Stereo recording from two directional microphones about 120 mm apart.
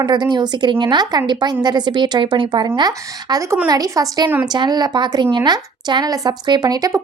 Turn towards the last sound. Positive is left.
turn(degrees=-30)  # may be behind; listen again after turning